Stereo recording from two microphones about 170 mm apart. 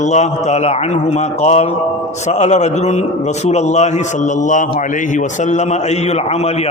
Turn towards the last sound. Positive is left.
turn(degrees=40)  # may be behind; listen again after turning